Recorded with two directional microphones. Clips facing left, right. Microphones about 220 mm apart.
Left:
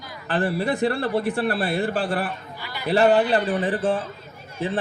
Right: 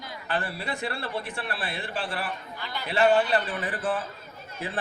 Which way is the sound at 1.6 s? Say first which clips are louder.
Left 10 dB; 50° left (ahead or behind).